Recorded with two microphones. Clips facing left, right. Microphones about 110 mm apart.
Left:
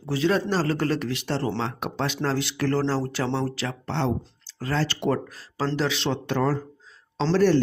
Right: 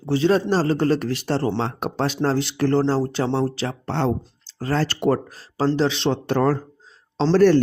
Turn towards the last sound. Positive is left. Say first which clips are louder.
# right 5 dB
turn(degrees=-50)  # may be behind; listen again after turning